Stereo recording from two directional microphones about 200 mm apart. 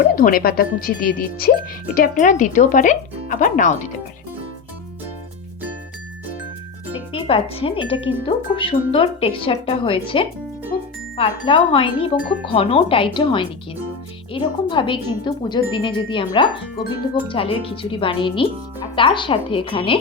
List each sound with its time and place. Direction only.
0.2 s speech: 45° left (ahead or behind)
7.1 s speech: 25° left (ahead or behind)
10.7 s music: 20° left (ahead or behind)
11.2 s speech: 25° left (ahead or behind)